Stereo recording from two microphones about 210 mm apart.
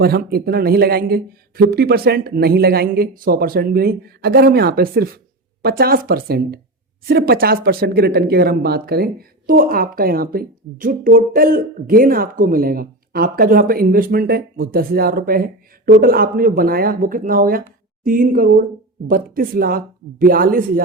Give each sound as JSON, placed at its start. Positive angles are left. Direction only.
{"t": 0.0, "sound": "speech", "side_deg": -45}